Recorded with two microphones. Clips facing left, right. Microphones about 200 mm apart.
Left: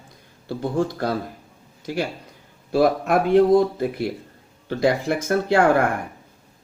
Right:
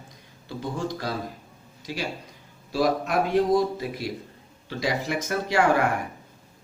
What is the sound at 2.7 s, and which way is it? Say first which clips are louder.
A man's voice: left 5 dB; 55° left (ahead or behind).